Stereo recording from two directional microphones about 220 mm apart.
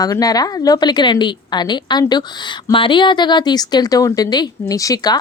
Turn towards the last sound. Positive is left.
turn(degrees=15)  # may be behind; listen again after turning